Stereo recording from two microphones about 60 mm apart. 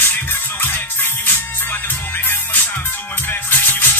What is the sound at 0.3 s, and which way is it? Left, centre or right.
Music, left.